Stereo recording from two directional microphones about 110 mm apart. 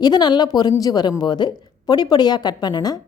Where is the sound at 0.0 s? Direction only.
40° left (ahead or behind).